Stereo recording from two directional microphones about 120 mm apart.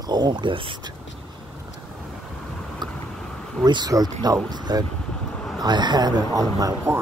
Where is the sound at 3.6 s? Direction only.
35° right (ahead or behind).